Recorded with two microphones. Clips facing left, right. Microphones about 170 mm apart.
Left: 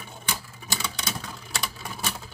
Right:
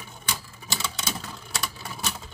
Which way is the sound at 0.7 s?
Centre (ahead or behind).